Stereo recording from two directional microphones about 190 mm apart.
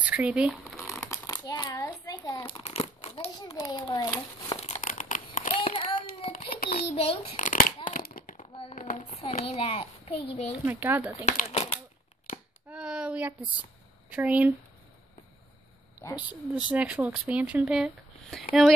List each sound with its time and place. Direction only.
0.0 s speech: 5° right (ahead or behind)
1.0 s crumpling: 15° left (ahead or behind); by 3.3 s 35° left (ahead or behind)
3.5 s a child's voice: 20° left (ahead or behind)
4.6 s crumpling: 35° left (ahead or behind)
5.6 s a sound: 30° left (ahead or behind)
6.3 s a sound: 50° left (ahead or behind)
7.0 s a sound: 30° left (ahead or behind); by 8.5 s 45° left (ahead or behind)
8.5 s a sound: 30° left (ahead or behind)
9.1 s a child's voice: 35° left (ahead or behind)
10.6 s speech: 10° right (ahead or behind)
11.2 s speech: 40° left (ahead or behind)
12.6 s child singing: 5° right (ahead or behind)
14.1 s speech: 10° right (ahead or behind)
16.2 s speech: 10° right (ahead or behind)